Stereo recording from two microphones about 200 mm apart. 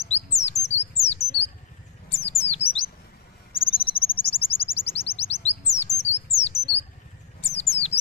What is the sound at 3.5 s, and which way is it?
Bird, 25° left (ahead or behind).